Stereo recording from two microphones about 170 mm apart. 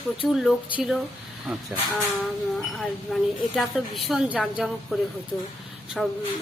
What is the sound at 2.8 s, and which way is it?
Speech, centre (ahead or behind).